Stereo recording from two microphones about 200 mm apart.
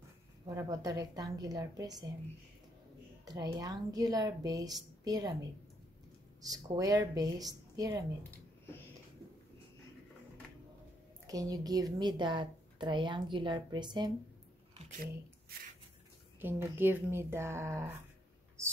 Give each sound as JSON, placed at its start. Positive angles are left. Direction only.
{"t": 0.6, "sound": "speech", "side_deg": -15}
{"t": 3.3, "sound": "speech", "side_deg": -20}
{"t": 8.3, "sound": "a sound", "side_deg": 10}
{"t": 11.2, "sound": "speech", "side_deg": -15}
{"t": 16.3, "sound": "speech", "side_deg": -10}
{"t": 18.6, "sound": "a sound", "side_deg": -15}